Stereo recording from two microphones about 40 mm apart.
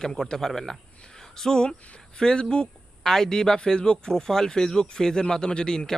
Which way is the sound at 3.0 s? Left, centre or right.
Centre.